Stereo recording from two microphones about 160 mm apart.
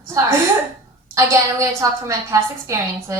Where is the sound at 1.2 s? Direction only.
20° right (ahead or behind).